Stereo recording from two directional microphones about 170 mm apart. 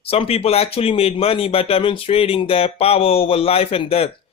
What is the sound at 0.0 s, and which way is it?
Speech, 35° left (ahead or behind).